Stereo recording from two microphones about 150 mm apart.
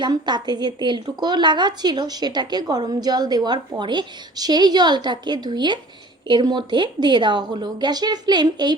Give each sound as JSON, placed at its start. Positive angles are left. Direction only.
{"t": 0.0, "sound": "a woman's voice", "side_deg": -30}